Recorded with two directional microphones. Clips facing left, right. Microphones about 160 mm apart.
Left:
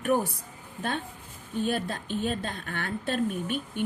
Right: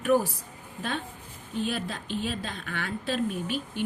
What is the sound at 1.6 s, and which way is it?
A woman's voice, 50° left (ahead or behind).